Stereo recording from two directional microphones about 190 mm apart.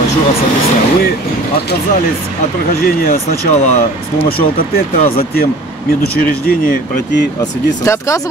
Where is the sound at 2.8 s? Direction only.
50° left (ahead or behind).